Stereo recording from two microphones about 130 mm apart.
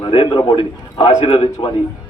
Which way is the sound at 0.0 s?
40° left (ahead or behind).